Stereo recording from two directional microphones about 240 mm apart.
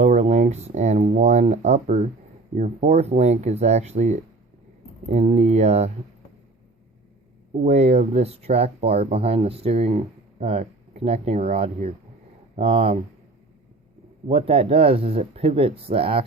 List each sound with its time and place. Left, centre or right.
0.0 s speech: right
7.6 s speech: right
14.3 s speech: right